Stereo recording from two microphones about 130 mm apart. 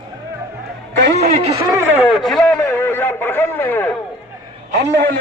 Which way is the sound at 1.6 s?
25° right (ahead or behind).